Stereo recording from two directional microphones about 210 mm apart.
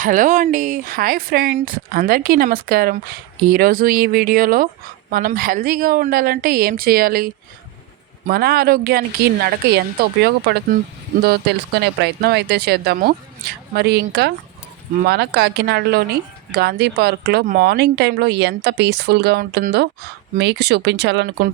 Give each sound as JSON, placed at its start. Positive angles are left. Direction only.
{"t": 0.0, "sound": "speech", "side_deg": -40}
{"t": 8.3, "sound": "speech", "side_deg": -45}